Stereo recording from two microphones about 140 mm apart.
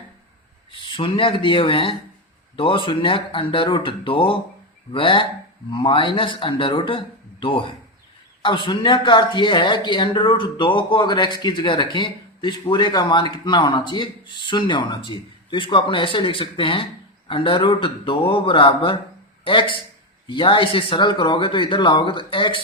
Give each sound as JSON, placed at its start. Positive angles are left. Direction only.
{"t": 0.7, "sound": "speech", "side_deg": 40}